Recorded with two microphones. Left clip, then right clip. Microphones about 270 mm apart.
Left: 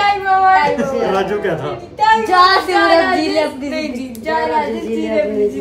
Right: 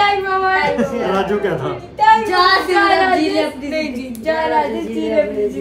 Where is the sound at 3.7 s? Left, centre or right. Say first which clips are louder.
Right 1 dB; centre.